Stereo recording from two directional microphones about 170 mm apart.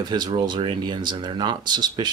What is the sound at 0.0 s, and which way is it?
Speech, 25° right (ahead or behind).